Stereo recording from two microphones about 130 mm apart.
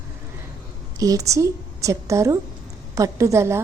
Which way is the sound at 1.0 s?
25° right (ahead or behind).